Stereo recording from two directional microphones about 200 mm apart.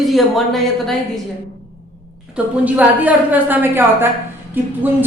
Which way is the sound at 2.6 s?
10° right (ahead or behind).